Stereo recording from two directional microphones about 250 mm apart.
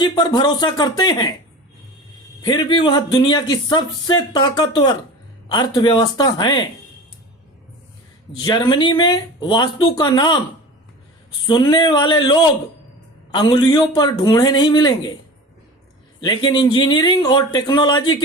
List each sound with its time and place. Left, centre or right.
0.0 s speech: centre
2.4 s speech: centre
8.4 s speech: centre
11.4 s speech: centre
16.2 s speech: centre